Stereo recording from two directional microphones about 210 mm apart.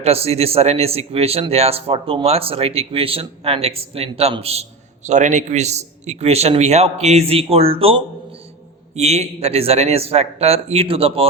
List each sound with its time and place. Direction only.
0.0 s a man's voice: 30° right (ahead or behind)